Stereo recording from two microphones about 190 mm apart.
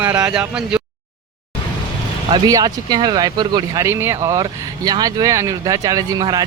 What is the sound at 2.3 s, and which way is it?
Speech, 20° right (ahead or behind).